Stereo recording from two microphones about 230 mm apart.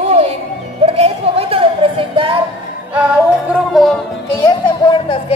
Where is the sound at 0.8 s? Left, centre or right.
Right.